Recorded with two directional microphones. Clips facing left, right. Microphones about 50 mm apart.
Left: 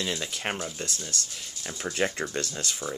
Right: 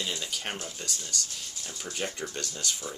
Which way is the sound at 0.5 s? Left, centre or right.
Left.